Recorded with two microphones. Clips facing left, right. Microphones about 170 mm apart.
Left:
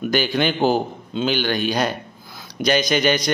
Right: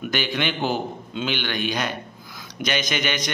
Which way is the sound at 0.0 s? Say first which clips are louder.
Left 6 dB; 35° left (ahead or behind).